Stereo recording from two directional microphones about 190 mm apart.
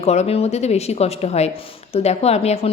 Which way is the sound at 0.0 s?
35° left (ahead or behind).